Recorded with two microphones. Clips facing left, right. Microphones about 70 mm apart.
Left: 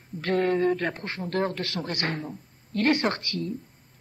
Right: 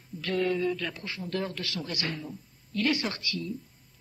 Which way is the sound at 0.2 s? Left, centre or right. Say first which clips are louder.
Left 4 dB; left.